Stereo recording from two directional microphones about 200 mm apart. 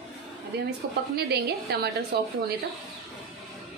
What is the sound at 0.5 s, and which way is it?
A woman's voice, 55° right (ahead or behind).